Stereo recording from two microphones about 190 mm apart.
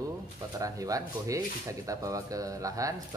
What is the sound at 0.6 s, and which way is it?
Speech, 20° right (ahead or behind).